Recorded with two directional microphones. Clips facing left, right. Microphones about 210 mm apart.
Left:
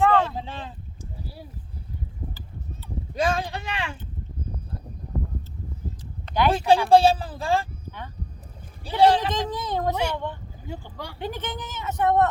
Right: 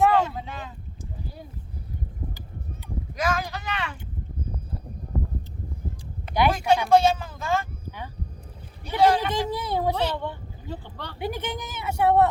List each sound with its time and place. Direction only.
0.0 s boat: 10° right (ahead or behind)
0.3 s boat: 30° left (ahead or behind)
3.2 s speech: 30° left (ahead or behind)
6.2 s a sound: 10° right (ahead or behind)
6.7 s speech: 30° left (ahead or behind)
7.9 s a sound: 10° right (ahead or behind)
9.0 s speech: 30° left (ahead or behind)
9.3 s speech: 10° right (ahead or behind)
9.9 s speech: 10° left (ahead or behind)
11.2 s speech: 10° right (ahead or behind)